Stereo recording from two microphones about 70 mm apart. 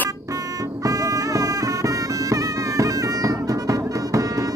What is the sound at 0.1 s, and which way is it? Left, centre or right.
Music, right.